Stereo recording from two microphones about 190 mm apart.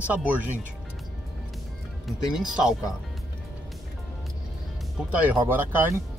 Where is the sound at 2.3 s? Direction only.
5° right (ahead or behind).